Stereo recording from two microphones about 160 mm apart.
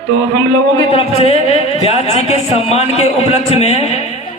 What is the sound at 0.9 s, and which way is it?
Speech, 35° left (ahead or behind).